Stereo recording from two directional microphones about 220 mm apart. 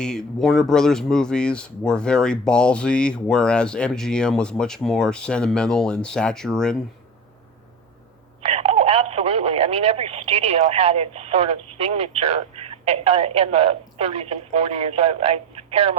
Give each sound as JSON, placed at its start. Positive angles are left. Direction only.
{"t": 0.0, "sound": "speech", "side_deg": 5}
{"t": 8.4, "sound": "speech", "side_deg": -25}